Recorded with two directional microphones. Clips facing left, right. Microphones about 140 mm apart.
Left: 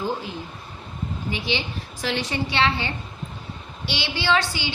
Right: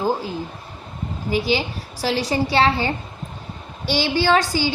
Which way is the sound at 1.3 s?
40° right (ahead or behind).